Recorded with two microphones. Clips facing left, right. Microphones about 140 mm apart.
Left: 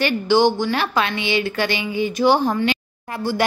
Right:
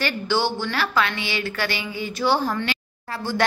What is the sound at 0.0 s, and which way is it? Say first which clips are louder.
A woman's voice: left 7 dB; 15° left (ahead or behind).